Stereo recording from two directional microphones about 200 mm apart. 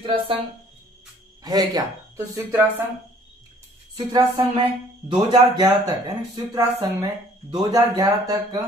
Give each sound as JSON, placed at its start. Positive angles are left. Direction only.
{"t": 0.0, "sound": "speech", "side_deg": -25}
{"t": 1.4, "sound": "speech", "side_deg": -20}
{"t": 3.9, "sound": "speech", "side_deg": -20}